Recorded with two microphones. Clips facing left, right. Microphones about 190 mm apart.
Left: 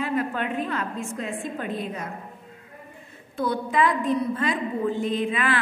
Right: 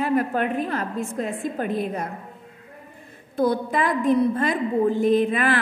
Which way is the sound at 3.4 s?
40° right (ahead or behind).